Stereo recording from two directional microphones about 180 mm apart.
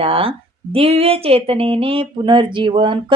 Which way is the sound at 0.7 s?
30° right (ahead or behind).